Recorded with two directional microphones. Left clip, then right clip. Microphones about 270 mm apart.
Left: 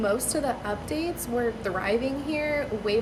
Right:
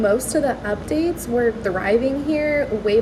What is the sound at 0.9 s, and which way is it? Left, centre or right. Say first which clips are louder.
A woman's voice: right 8 dB; left.